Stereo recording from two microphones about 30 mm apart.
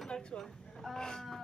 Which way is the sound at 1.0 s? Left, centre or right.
Left.